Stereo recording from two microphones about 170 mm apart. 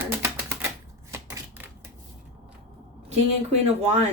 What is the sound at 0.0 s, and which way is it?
Typewriter, 10° right (ahead or behind).